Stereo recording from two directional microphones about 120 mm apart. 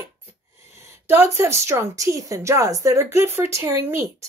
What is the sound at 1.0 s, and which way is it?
A woman's voice, 20° right (ahead or behind).